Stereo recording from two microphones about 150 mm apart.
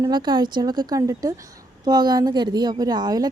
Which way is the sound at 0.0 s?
25° right (ahead or behind).